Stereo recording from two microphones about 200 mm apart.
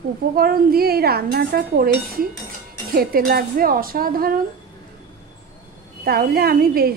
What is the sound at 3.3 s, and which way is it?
Speech, 45° right (ahead or behind).